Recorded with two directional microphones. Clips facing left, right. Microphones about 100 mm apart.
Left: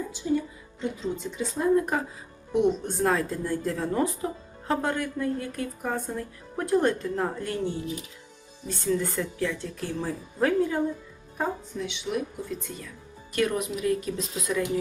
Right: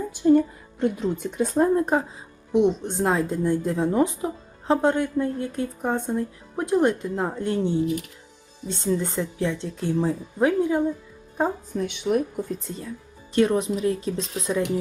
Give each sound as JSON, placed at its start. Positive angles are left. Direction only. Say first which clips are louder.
{"t": 0.1, "sound": "a woman's voice", "louder": "right 13 dB", "side_deg": -55}
{"t": 1.7, "sound": "speech", "louder": "right 2 dB", "side_deg": -25}
{"t": 11.7, "sound": "a woman's voice", "louder": "right 7 dB", "side_deg": -50}
{"t": 12.6, "sound": "speech", "louder": "right 5 dB", "side_deg": -30}